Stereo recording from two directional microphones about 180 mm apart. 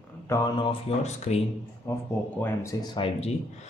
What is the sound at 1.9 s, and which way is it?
Speech, 15° left (ahead or behind).